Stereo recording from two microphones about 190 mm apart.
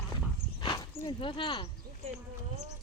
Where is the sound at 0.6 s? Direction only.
20° left (ahead or behind).